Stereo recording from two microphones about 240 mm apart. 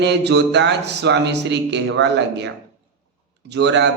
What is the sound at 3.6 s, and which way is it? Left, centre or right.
Speech, right.